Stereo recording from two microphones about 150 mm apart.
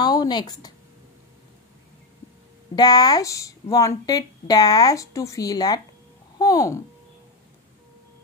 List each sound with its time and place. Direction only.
0.0 s speech: 25° left (ahead or behind)
2.7 s speech: 25° left (ahead or behind)